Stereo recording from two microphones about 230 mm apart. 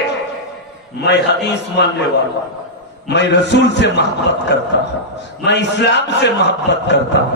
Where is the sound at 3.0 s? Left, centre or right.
Left.